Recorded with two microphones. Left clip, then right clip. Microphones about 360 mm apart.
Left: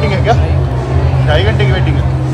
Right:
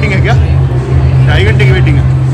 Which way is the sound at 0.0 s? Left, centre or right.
Centre.